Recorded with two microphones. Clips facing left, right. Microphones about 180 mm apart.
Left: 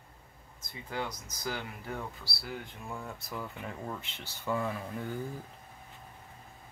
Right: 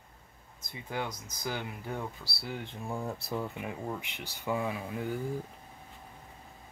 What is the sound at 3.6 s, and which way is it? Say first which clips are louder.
Speech: right 3 dB; 15° right (ahead or behind).